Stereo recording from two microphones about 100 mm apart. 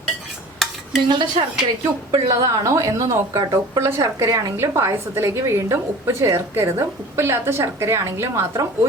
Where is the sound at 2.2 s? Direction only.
30° right (ahead or behind).